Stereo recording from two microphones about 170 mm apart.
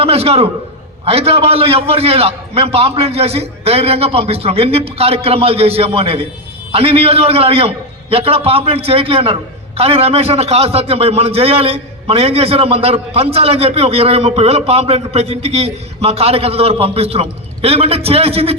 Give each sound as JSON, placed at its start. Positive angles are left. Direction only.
{"t": 0.0, "sound": "a man's voice", "side_deg": -35}